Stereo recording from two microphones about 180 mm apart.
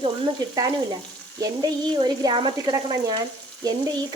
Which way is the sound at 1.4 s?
25° right (ahead or behind).